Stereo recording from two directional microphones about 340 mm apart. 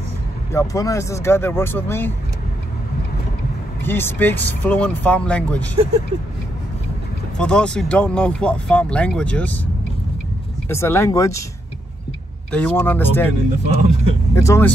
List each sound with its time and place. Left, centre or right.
0.5 s speech: centre
3.8 s speech: centre
7.3 s speech: centre
10.7 s speech: centre
12.4 s speech: centre
13.7 s speech: centre
14.3 s speech: centre